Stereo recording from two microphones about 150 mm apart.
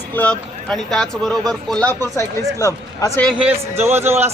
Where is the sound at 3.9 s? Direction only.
15° right (ahead or behind).